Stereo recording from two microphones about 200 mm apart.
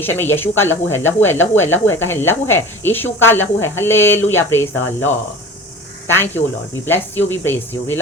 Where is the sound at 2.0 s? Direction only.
10° left (ahead or behind).